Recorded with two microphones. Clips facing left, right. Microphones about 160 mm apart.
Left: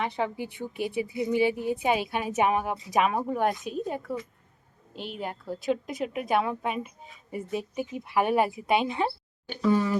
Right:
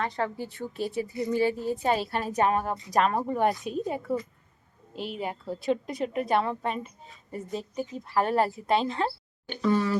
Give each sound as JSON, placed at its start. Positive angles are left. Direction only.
{"t": 0.0, "sound": "a woman's voice", "side_deg": 15}